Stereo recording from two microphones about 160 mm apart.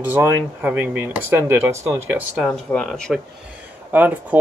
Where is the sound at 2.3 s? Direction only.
Centre (ahead or behind).